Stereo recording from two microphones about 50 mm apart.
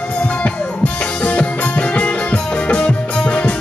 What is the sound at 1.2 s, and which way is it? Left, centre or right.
Music, left.